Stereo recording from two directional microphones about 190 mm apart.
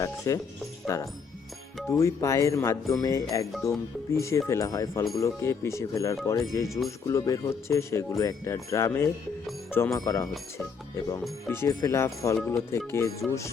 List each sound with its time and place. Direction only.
0.3 s speech: 15° left (ahead or behind)
11.4 s speech: 15° left (ahead or behind)